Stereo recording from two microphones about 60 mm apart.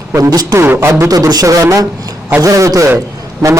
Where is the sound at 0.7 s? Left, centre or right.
Right.